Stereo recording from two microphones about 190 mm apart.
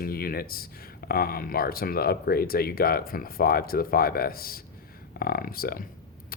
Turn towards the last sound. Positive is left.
turn(degrees=50)  # may be behind; listen again after turning